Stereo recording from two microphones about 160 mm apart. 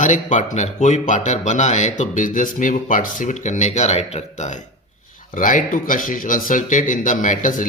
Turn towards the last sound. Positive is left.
turn(degrees=55)  # may be behind; listen again after turning